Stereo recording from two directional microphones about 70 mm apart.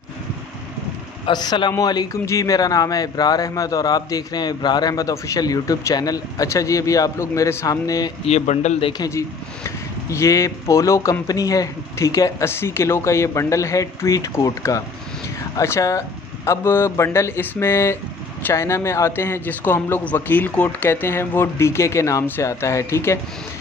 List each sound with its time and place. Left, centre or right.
1.3 s a man's voice: left
1.7 s speech: left
2.2 s speech: left
9.1 s speech: left
12.4 s a man's voice: left
20.9 s a man's voice: left